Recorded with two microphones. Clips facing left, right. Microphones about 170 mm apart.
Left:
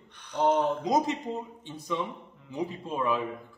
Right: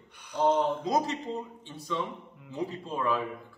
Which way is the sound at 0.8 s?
15° left (ahead or behind).